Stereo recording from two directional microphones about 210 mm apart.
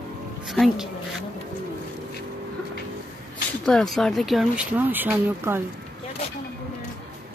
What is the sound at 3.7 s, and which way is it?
Speech, centre (ahead or behind).